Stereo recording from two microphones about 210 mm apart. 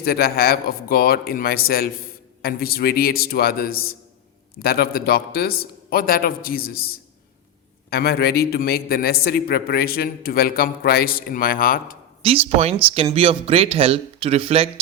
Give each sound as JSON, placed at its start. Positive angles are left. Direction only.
{"t": 0.0, "sound": "a man's voice", "side_deg": 45}
{"t": 12.2, "sound": "speech", "side_deg": -30}